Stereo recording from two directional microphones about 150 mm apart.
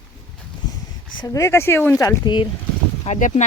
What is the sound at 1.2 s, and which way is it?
Speech, 20° left (ahead or behind).